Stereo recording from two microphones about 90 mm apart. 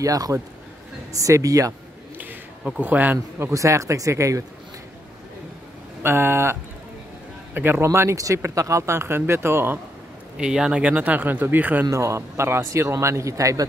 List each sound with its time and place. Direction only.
0.0 s a man's voice: 40° right (ahead or behind)
2.8 s a man's voice: 20° right (ahead or behind); by 4.5 s 35° right (ahead or behind)
6.0 s speech: 25° right (ahead or behind)
10.3 s speech: 10° right (ahead or behind)
11.9 s a man's voice: 35° right (ahead or behind)